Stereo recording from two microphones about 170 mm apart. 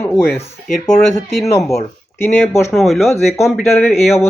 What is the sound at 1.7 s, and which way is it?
Speech, 15° left (ahead or behind).